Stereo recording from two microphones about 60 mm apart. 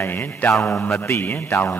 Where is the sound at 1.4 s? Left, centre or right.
Left.